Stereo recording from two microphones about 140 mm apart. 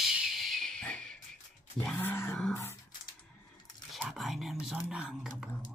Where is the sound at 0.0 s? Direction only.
5° right (ahead or behind); by 2.8 s 20° left (ahead or behind).